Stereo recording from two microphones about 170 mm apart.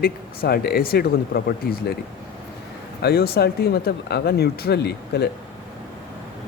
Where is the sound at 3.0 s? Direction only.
70° left (ahead or behind).